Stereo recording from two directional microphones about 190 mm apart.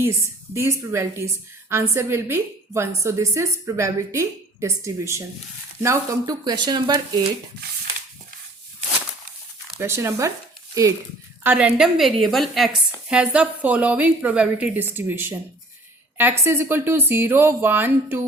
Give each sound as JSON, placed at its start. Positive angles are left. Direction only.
{"t": 0.0, "sound": "a woman's voice", "side_deg": -15}
{"t": 9.8, "sound": "a woman's voice", "side_deg": -15}
{"t": 11.4, "sound": "a woman's voice", "side_deg": -5}